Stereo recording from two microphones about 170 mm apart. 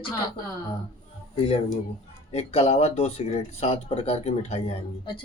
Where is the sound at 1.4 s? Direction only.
35° left (ahead or behind).